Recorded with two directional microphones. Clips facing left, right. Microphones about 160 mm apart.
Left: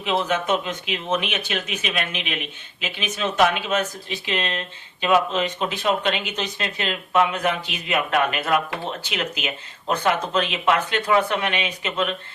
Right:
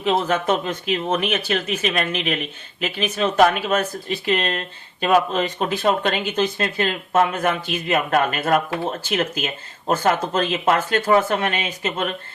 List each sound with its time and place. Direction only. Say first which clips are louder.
0.0 s speech: right 3 dB; 45° right (ahead or behind)